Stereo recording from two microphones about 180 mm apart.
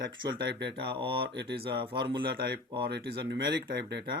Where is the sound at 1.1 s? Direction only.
70° right (ahead or behind).